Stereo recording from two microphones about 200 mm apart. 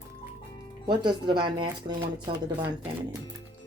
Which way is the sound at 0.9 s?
20° right (ahead or behind).